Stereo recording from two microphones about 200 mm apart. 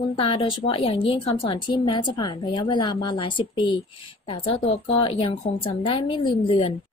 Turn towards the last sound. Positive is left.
turn(degrees=30)  # may be behind; listen again after turning